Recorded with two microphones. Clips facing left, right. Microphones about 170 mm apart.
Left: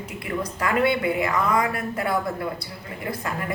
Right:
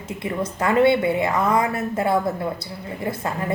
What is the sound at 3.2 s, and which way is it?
Speech, 25° right (ahead or behind).